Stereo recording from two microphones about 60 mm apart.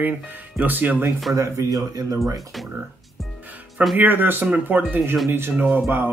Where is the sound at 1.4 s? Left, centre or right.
Right.